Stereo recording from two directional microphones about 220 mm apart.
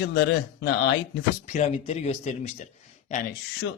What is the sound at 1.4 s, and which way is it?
Speech, 30° left (ahead or behind).